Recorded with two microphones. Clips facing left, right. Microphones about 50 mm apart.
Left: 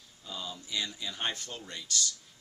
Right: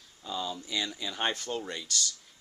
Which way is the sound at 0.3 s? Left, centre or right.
Right.